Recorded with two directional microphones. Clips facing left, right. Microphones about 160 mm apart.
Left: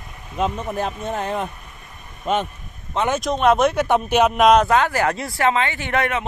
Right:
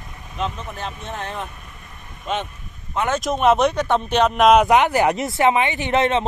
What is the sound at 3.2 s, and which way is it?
Speech, centre (ahead or behind).